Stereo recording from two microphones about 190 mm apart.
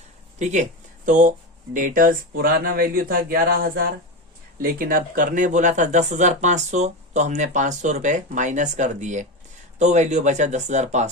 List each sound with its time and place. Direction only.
0.3 s speech: 40° right (ahead or behind)